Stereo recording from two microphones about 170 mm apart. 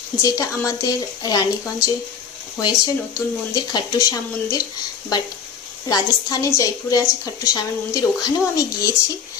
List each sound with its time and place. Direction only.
0.2 s speech: 20° left (ahead or behind)
5.9 s speech: 20° left (ahead or behind)